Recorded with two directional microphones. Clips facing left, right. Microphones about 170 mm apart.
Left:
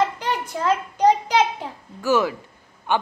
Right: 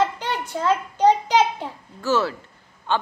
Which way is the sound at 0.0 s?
10° left (ahead or behind).